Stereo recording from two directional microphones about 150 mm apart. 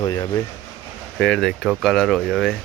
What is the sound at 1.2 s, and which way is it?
Speech, centre (ahead or behind).